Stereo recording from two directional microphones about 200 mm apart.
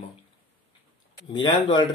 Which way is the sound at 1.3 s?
20° left (ahead or behind).